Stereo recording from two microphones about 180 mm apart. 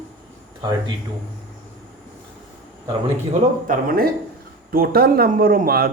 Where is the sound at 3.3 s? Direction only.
50° right (ahead or behind).